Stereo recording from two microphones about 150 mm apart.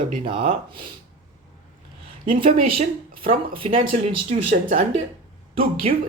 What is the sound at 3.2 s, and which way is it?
Speech, 35° right (ahead or behind).